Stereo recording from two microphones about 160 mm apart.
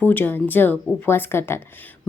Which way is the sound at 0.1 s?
10° left (ahead or behind).